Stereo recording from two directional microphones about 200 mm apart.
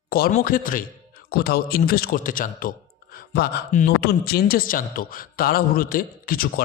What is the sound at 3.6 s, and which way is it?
A man's voice, 40° left (ahead or behind).